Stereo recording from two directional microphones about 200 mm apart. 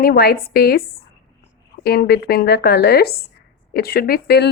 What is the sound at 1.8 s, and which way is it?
Speech, 50° left (ahead or behind).